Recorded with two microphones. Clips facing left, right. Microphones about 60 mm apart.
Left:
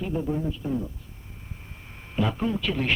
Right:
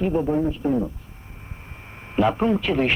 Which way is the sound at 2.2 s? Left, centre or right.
Right.